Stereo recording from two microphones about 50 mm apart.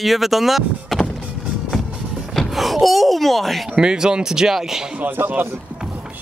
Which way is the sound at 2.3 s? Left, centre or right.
Centre.